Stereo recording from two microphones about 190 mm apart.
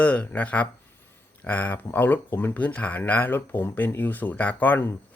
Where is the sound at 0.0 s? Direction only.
5° left (ahead or behind).